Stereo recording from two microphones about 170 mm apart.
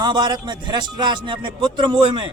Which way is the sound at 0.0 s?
25° right (ahead or behind).